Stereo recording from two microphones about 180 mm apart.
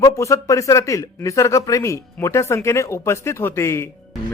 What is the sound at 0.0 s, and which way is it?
Speech, 15° left (ahead or behind).